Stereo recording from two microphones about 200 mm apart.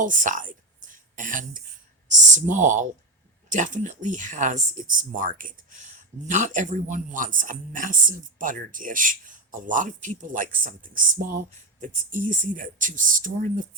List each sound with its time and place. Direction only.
0.0 s speech: 40° right (ahead or behind)